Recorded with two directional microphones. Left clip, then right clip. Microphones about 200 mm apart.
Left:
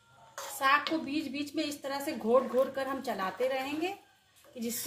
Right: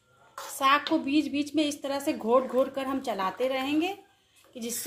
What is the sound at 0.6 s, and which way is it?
A woman's voice, 30° right (ahead or behind).